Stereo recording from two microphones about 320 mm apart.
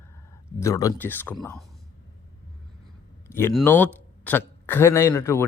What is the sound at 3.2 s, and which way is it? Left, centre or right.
Speech, centre.